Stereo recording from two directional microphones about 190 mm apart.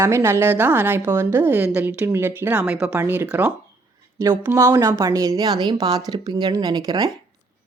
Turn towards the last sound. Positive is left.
turn(degrees=-20)  # may be behind; listen again after turning